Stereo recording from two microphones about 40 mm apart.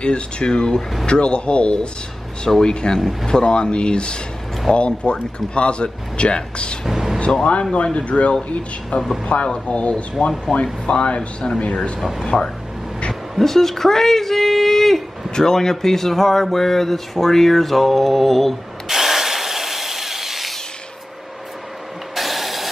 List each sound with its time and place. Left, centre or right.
0.0 s a woman's voice: left
3.0 s speech: centre
3.3 s speech: left
6.9 s speech: centre
7.7 s speech: left
12.0 s speech: centre
13.4 s a woman's voice: centre
18.9 s wood: centre
22.1 s ratchet: centre